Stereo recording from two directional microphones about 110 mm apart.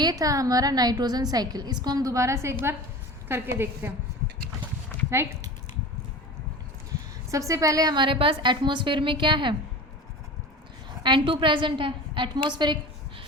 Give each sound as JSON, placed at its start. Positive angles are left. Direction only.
{"t": 0.0, "sound": "a woman's voice", "side_deg": -35}
{"t": 5.2, "sound": "a woman's voice", "side_deg": -25}
{"t": 7.3, "sound": "a woman's voice", "side_deg": -30}
{"t": 11.0, "sound": "a woman's voice", "side_deg": -50}